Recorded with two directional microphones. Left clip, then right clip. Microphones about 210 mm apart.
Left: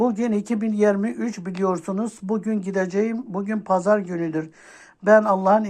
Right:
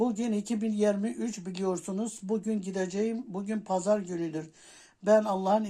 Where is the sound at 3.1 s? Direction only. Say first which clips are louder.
Left 8 dB; 15° left (ahead or behind).